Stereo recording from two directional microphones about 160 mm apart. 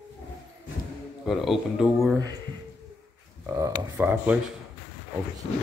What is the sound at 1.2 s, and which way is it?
Speech, centre (ahead or behind).